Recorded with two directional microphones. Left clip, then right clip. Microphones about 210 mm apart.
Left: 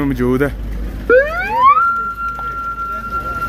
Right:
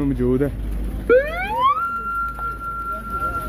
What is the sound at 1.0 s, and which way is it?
Car alarm, 50° right (ahead or behind).